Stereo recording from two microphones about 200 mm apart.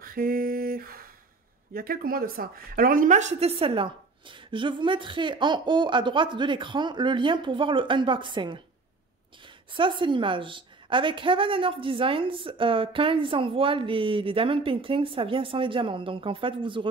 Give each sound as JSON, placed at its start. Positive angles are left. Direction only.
{"t": 0.0, "sound": "a sound", "side_deg": -45}
{"t": 1.7, "sound": "a woman's voice", "side_deg": -45}
{"t": 9.7, "sound": "a woman's voice", "side_deg": -25}